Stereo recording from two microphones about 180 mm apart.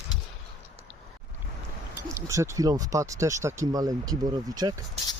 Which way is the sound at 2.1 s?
15° right (ahead or behind).